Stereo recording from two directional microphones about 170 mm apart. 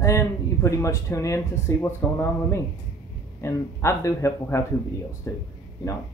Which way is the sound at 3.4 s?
15° left (ahead or behind).